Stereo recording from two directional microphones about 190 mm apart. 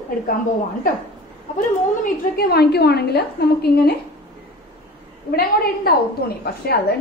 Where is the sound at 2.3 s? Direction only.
55° left (ahead or behind).